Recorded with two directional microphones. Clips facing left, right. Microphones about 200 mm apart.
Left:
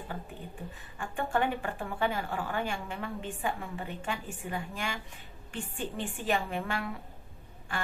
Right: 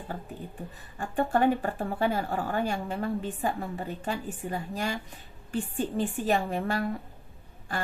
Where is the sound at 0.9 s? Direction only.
40° right (ahead or behind).